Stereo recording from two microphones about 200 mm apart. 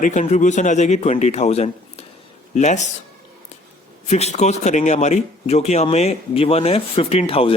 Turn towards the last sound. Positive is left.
turn(degrees=30)  # may be behind; listen again after turning